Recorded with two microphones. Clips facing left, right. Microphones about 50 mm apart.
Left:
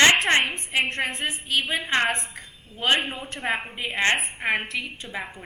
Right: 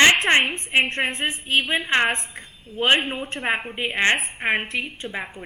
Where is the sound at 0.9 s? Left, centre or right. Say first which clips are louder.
Right 3 dB; right.